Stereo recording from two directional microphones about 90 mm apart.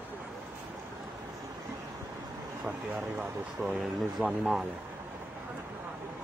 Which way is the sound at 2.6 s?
20° right (ahead or behind).